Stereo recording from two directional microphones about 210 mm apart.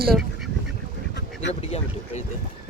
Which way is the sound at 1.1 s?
55° left (ahead or behind).